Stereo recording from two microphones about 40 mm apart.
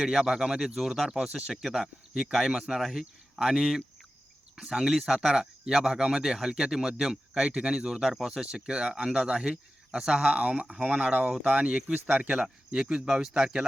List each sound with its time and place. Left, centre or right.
0.0 s speech: centre
1.2 s speech: right
1.6 s speech: centre; by 10.7 s right
10.7 s speech: centre
10.9 s speech: right
11.9 s speech: right
12.4 s speech: centre